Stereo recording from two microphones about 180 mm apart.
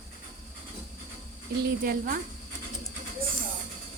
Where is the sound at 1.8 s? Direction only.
55° right (ahead or behind).